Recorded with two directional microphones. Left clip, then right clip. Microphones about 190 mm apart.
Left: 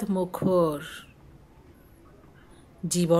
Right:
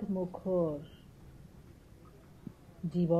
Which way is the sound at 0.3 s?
90° left.